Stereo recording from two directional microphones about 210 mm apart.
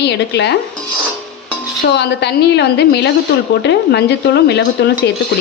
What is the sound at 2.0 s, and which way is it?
Speech, 55° left (ahead or behind).